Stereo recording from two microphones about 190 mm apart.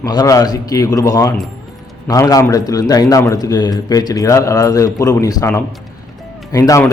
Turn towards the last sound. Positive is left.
turn(degrees=20)  # may be behind; listen again after turning